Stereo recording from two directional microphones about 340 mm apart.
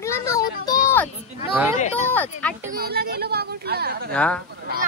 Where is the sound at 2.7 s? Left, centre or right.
Right.